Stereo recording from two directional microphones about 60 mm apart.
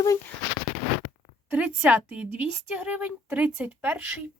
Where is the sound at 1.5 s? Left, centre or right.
Right.